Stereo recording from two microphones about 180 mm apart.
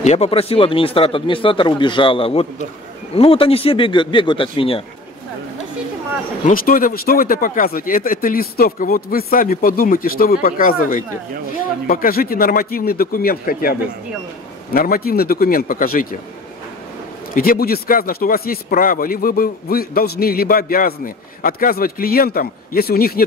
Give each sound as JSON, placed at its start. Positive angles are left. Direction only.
{"t": 0.0, "sound": "speech", "side_deg": 35}
{"t": 6.4, "sound": "speech", "side_deg": 50}
{"t": 17.3, "sound": "speech", "side_deg": 55}